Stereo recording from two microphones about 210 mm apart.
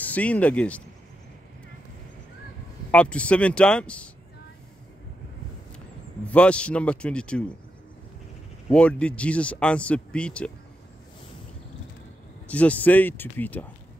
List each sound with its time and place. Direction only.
0.0 s speech: 5° left (ahead or behind)
2.9 s speech: 5° left (ahead or behind)
6.2 s speech: 5° left (ahead or behind)
8.6 s speech: 5° left (ahead or behind)
12.4 s speech: 5° left (ahead or behind)